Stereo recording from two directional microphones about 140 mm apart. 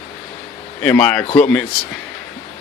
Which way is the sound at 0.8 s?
10° left (ahead or behind).